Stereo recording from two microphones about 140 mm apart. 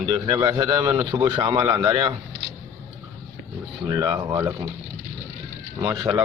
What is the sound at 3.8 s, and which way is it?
Speech, 30° right (ahead or behind).